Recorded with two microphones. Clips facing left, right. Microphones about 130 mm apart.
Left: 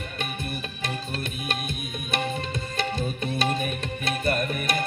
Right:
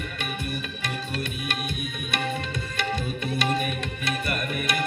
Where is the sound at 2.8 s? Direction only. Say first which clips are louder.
Even; 30° left (ahead or behind).